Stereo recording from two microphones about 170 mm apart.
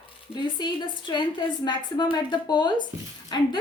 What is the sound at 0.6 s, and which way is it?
A woman's voice, 25° left (ahead or behind).